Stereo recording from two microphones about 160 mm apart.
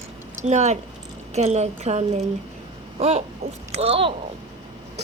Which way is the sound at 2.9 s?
40° right (ahead or behind).